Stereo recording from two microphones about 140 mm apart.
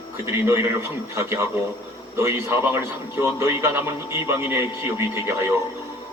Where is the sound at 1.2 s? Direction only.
20° right (ahead or behind).